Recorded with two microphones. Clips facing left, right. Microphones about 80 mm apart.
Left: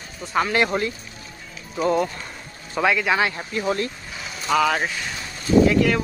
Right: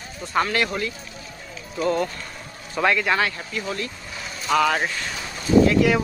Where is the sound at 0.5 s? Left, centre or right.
Left.